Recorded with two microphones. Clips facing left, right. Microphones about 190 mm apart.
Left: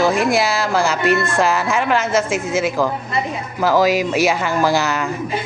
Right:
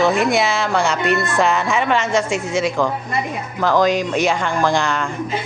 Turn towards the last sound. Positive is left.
turn(degrees=5)  # may be behind; listen again after turning